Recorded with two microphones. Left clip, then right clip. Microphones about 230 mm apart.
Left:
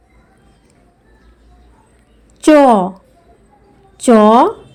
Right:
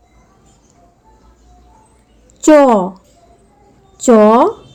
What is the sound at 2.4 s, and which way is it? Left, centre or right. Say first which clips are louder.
A woman's voice: even; centre.